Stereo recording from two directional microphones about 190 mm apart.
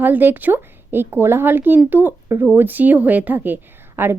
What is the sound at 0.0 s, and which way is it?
A woman's voice, 10° right (ahead or behind).